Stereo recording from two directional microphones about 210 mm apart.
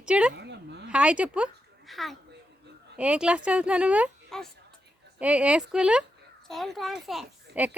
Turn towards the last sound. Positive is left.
turn(degrees=-5)  # may be behind; listen again after turning